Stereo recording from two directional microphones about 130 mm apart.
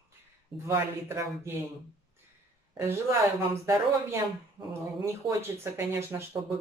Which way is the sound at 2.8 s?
20° right (ahead or behind).